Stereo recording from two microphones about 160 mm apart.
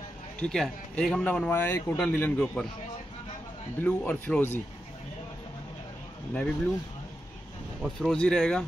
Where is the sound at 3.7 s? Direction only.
10° left (ahead or behind).